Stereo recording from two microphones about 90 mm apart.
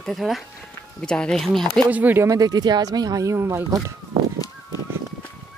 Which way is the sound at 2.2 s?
45° right (ahead or behind).